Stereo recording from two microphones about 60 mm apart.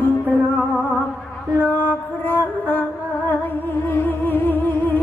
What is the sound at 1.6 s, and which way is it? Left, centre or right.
Music, left.